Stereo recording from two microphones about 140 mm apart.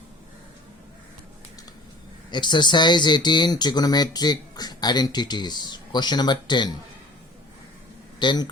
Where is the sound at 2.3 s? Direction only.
30° left (ahead or behind).